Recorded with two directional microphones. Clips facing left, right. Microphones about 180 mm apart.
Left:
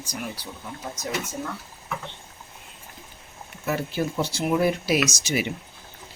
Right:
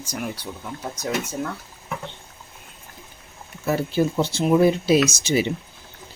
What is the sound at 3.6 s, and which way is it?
Speech, 30° right (ahead or behind).